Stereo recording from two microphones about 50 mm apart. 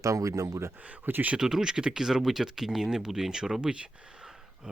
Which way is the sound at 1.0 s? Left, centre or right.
Right.